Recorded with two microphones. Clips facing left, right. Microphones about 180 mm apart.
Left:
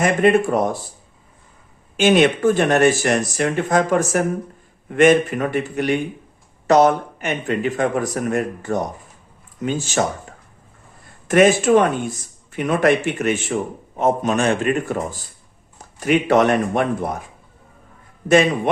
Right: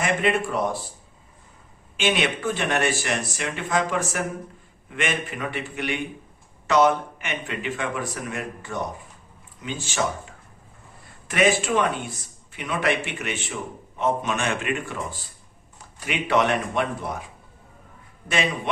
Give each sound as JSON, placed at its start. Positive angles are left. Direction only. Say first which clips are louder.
{"t": 0.0, "sound": "speech", "louder": "left 8 dB", "side_deg": 45}
{"t": 2.0, "sound": "speech", "louder": "left 9 dB", "side_deg": 45}
{"t": 11.3, "sound": "speech", "louder": "left 8 dB", "side_deg": 45}
{"t": 18.3, "sound": "speech", "louder": "left 11 dB", "side_deg": 45}